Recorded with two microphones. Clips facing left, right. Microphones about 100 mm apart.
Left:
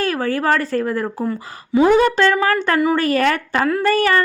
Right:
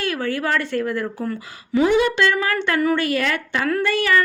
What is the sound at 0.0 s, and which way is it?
Speech, 40° left (ahead or behind).